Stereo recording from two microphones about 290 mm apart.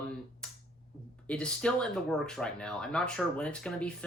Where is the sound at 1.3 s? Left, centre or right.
Centre.